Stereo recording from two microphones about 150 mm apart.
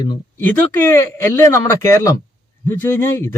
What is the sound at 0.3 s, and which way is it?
Speech, 15° left (ahead or behind).